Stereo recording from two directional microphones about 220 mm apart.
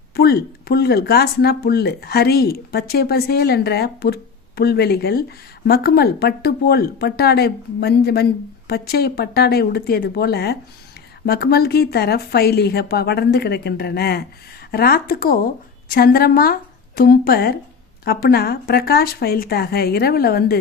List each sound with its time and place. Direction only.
0.2 s speech: 45° left (ahead or behind)